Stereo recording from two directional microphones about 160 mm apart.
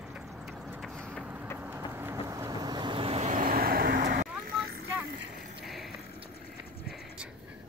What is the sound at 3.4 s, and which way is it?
Vehicle, 65° right (ahead or behind).